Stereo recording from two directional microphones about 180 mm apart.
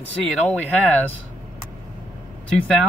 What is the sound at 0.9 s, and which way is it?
Speech, 10° left (ahead or behind).